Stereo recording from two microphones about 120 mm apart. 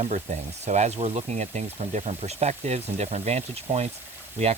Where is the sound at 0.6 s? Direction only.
70° right (ahead or behind).